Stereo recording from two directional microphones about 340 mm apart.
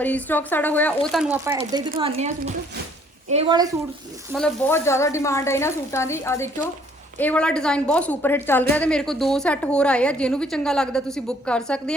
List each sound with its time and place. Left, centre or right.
0.0 s a woman's voice: centre
4.3 s a woman's voice: centre